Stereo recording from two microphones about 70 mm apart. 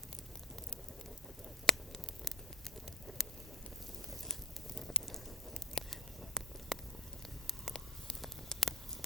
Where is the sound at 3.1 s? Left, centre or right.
Centre.